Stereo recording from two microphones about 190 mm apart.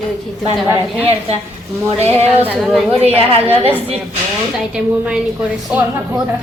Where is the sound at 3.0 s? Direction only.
30° right (ahead or behind).